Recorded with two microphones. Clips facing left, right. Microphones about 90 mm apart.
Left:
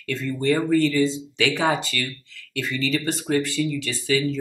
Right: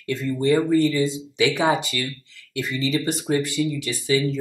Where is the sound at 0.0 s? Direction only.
20° right (ahead or behind).